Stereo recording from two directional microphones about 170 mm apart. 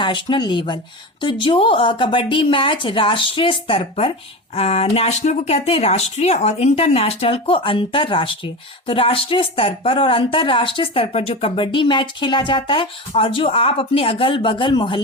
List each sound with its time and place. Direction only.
0.0 s a woman's voice: 25° left (ahead or behind)